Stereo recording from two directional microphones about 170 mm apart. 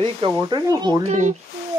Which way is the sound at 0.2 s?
25° right (ahead or behind).